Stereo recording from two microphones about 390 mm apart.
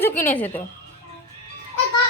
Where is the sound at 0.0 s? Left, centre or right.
Centre.